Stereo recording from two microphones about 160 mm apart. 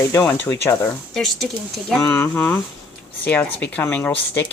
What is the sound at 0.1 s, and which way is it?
Speech, 15° left (ahead or behind).